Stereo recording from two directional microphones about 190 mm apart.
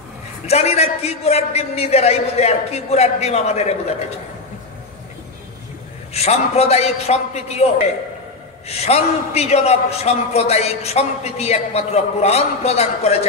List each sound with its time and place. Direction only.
0.5 s a man's voice: 35° left (ahead or behind)
6.1 s a man's voice: 35° left (ahead or behind)
8.6 s a man's voice: 35° left (ahead or behind)